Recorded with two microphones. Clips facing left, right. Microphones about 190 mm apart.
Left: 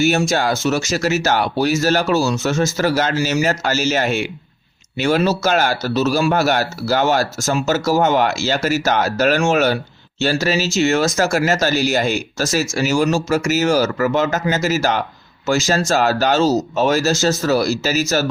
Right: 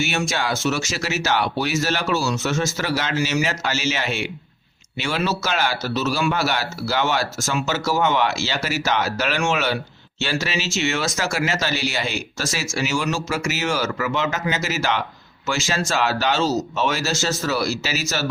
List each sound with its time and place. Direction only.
0.0 s speech: 40° left (ahead or behind)